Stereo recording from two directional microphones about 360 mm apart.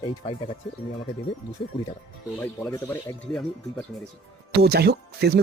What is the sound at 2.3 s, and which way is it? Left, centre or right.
Speech, centre.